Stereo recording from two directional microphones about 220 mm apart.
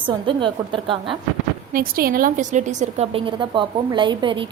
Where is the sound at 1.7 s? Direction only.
40° right (ahead or behind).